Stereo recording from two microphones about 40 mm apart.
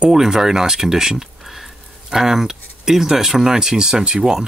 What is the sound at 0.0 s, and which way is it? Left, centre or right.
Speech, centre.